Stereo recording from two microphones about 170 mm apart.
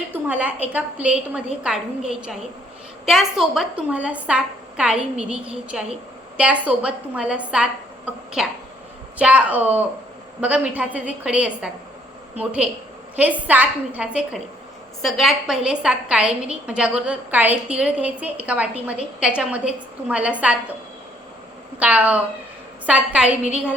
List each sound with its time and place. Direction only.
0.1 s a woman's voice: 10° right (ahead or behind)
21.8 s a woman's voice: 10° right (ahead or behind)